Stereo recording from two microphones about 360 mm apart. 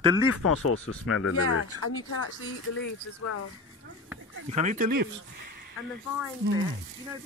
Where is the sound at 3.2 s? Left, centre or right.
Left.